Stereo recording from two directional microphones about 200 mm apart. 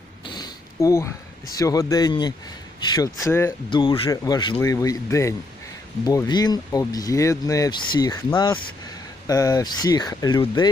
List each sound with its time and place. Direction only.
0.3 s a sound: 20° left (ahead or behind)
1.5 s speech: 15° left (ahead or behind)
3.7 s speech: 25° left (ahead or behind)